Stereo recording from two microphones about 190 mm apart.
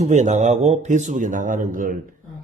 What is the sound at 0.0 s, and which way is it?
Speech, 40° right (ahead or behind).